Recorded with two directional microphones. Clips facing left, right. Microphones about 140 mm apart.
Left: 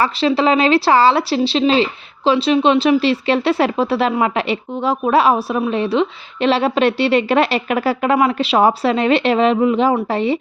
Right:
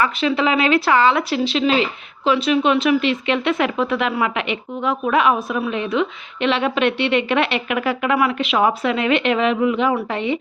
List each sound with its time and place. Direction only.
0.0 s speech: 35° left (ahead or behind)